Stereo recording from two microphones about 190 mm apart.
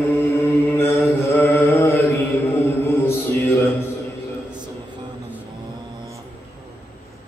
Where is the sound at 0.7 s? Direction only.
15° left (ahead or behind).